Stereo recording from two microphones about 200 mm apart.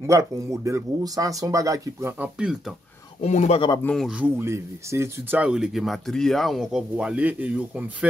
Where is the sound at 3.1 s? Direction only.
35° left (ahead or behind).